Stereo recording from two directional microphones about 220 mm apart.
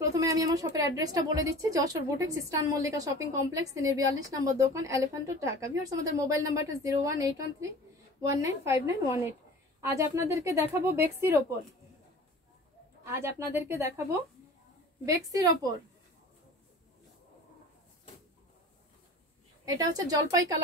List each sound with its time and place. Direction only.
0.0 s a woman's voice: 15° right (ahead or behind)
13.0 s a woman's voice: 10° right (ahead or behind)
19.6 s a woman's voice: 15° right (ahead or behind)